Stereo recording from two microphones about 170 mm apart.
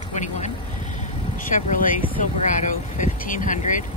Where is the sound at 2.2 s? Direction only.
50° left (ahead or behind).